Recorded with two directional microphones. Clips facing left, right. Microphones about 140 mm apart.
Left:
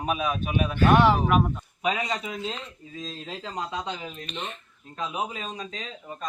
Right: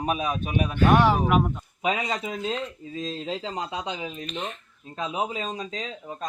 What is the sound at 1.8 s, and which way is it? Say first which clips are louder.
Speech: right 1 dB; 25° right (ahead or behind).